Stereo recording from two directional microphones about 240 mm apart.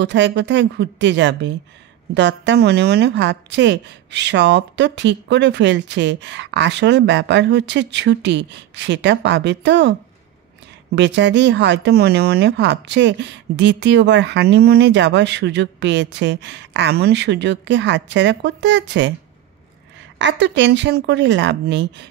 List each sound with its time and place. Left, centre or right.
0.0 s speech: right
11.0 s speech: right
20.2 s speech: right